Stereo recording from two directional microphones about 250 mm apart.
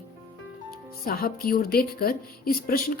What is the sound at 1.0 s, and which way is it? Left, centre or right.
Speech, left.